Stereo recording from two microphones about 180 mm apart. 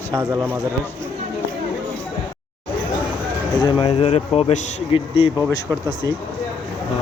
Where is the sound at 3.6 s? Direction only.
30° left (ahead or behind).